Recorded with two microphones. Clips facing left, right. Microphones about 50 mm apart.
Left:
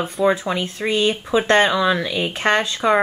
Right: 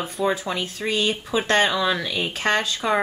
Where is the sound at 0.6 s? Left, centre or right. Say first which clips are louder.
Left 4 dB; left.